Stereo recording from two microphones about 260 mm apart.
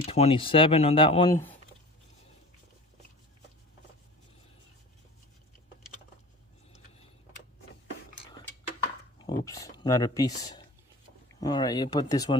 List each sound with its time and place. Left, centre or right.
0.0 s speech: left
9.2 s a sound: centre
11.3 s speech: centre